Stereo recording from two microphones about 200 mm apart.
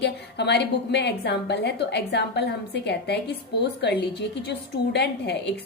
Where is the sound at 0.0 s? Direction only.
55° left (ahead or behind).